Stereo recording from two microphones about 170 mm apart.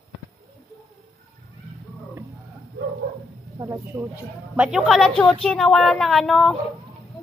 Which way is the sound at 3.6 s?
15° right (ahead or behind).